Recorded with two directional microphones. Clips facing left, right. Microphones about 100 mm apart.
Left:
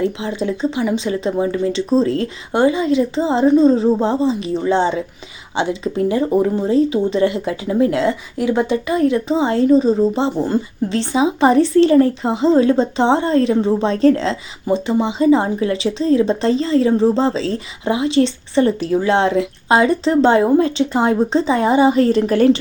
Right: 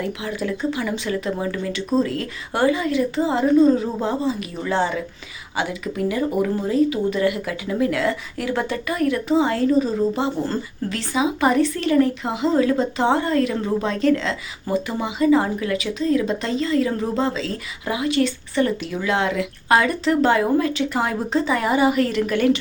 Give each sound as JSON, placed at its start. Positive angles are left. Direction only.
{"t": 0.0, "sound": "speech", "side_deg": 25}